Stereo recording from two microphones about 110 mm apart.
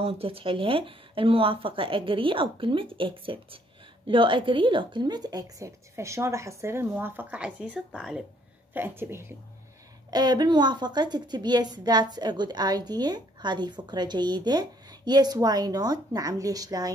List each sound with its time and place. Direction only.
0.0 s a woman's voice: 60° right (ahead or behind); by 8.2 s 10° right (ahead or behind)
8.7 s a woman's voice: 20° right (ahead or behind)
10.1 s a woman's voice: 40° right (ahead or behind)